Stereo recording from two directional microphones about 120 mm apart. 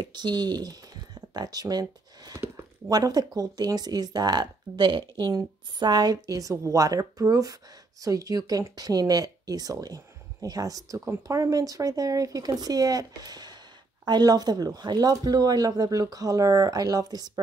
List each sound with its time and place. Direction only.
0.0 s speech: 40° right (ahead or behind)